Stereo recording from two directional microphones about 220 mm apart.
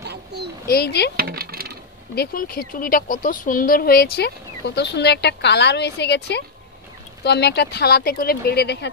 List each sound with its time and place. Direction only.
0.7 s speech: 45° left (ahead or behind)
1.1 s a sound: 45° right (ahead or behind)
2.1 s speech: 45° left (ahead or behind)